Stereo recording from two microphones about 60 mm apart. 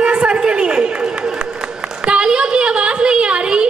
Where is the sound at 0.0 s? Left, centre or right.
Centre.